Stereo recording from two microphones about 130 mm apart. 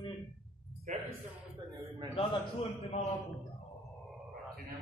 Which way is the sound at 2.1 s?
55° left (ahead or behind).